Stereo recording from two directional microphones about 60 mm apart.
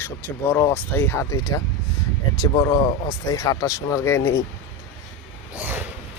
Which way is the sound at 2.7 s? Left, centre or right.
Left.